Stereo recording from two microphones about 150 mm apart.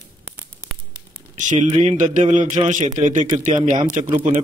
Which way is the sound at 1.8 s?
60° right (ahead or behind).